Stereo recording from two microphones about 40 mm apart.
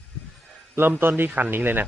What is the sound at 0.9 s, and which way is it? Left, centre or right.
Speech, right.